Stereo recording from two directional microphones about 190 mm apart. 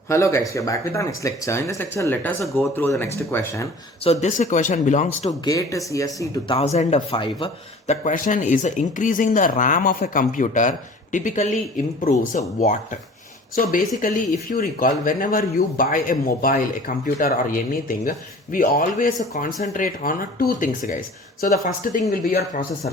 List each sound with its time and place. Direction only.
0.1 s speech: 15° left (ahead or behind)
4.0 s a man's voice: 35° left (ahead or behind)
5.3 s speech: 20° left (ahead or behind)
6.6 s a man's voice: 35° left (ahead or behind)
8.0 s a man's voice: 45° left (ahead or behind)